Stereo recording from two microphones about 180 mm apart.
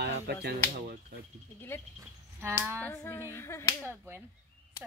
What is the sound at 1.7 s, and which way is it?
Finger snapping, 10° left (ahead or behind).